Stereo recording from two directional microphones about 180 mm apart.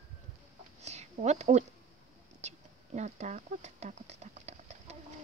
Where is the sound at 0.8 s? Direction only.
40° right (ahead or behind).